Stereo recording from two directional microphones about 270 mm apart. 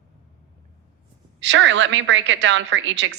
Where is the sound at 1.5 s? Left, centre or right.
Right.